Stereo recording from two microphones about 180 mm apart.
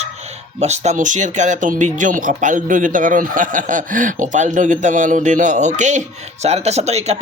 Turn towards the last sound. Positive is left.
turn(degrees=-35)  # may be behind; listen again after turning